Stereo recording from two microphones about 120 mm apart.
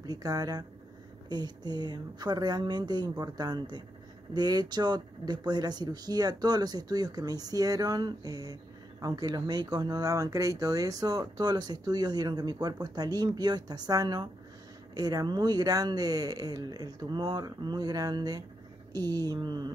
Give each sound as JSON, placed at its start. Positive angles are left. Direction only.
{"t": 0.0, "sound": "speech", "side_deg": -30}